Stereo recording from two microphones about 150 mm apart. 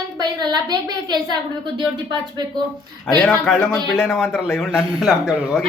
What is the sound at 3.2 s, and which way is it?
A man's voice, 5° left (ahead or behind).